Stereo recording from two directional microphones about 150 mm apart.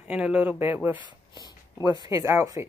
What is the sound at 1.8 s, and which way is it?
Speech, 25° right (ahead or behind).